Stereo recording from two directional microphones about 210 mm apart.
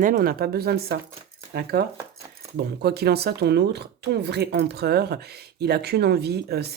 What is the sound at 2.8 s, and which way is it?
Speech, 50° right (ahead or behind).